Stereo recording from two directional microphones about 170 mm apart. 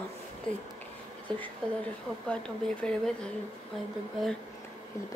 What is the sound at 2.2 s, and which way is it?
Speech, 5° left (ahead or behind).